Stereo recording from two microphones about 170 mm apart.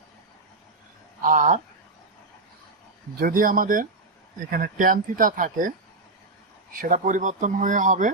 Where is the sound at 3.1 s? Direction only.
55° right (ahead or behind).